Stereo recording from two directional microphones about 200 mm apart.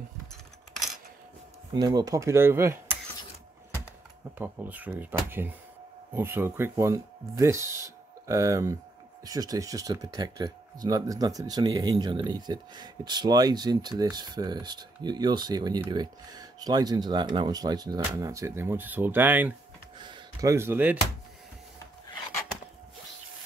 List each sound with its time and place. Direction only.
1.7 s speech: 20° right (ahead or behind)
4.4 s speech: 10° right (ahead or behind)
20.0 s speech: 20° right (ahead or behind)